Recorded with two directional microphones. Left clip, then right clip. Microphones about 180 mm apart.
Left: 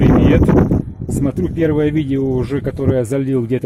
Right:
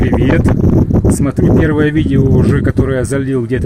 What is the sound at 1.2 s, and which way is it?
Speech, 20° left (ahead or behind).